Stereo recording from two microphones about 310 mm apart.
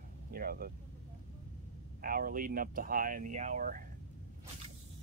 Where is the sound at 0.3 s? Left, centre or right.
Right.